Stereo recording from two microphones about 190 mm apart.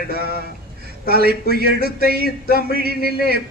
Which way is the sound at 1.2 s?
55° right (ahead or behind).